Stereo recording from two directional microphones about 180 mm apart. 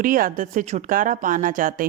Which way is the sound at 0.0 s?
50° right (ahead or behind).